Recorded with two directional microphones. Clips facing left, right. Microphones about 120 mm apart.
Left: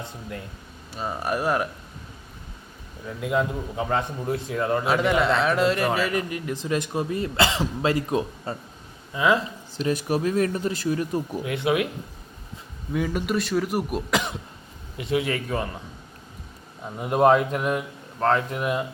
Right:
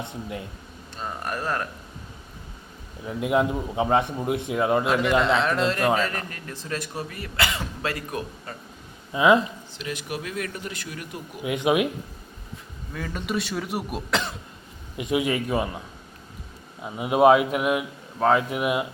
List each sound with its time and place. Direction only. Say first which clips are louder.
0.0 s a man's voice: right 3 dB; 20° right (ahead or behind)
0.9 s a man's voice: left 4 dB; 10° left (ahead or behind)
3.1 s a man's voice: right 2 dB; 20° right (ahead or behind)
4.9 s a man's voice: even; 5° left (ahead or behind); by 8.5 s 25° left (ahead or behind)
9.1 s a man's voice: right 3 dB; 20° right (ahead or behind)
9.7 s speech: left 9 dB; 40° left (ahead or behind)
11.4 s a man's voice: right 4 dB; 15° right (ahead or behind)
12.9 s a man's voice: left 7 dB; 15° left (ahead or behind)
13.2 s speech: left 4 dB; centre (ahead or behind)
14.1 s a man's voice: right 1 dB; 15° left (ahead or behind)
14.9 s a man's voice: right 1 dB; 15° right (ahead or behind)
16.8 s a man's voice: right 2 dB; 5° right (ahead or behind)